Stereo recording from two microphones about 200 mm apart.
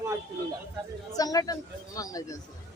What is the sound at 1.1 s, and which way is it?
A man's voice, 20° left (ahead or behind).